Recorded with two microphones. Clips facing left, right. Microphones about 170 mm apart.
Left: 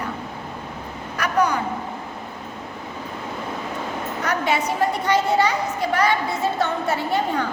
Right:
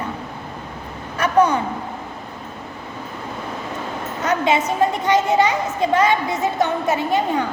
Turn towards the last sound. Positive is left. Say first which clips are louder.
# right 3 dB
turn(degrees=-20)  # may be behind; listen again after turning